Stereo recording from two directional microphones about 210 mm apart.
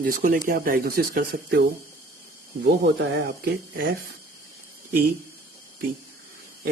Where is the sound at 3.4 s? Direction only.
45° right (ahead or behind).